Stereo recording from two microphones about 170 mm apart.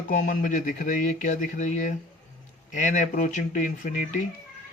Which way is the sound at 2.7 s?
45° left (ahead or behind).